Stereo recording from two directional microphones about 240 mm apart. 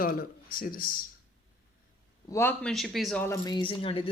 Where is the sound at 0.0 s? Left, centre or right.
Left.